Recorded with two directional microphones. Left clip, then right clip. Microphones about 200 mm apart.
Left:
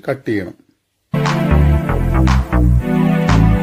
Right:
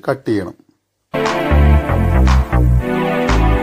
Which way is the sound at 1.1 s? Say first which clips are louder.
Right 2 dB; centre (ahead or behind).